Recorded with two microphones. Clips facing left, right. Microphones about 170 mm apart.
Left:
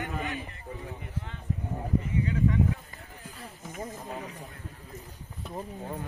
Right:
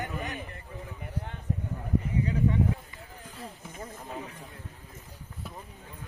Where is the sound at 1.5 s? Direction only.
45° right (ahead or behind).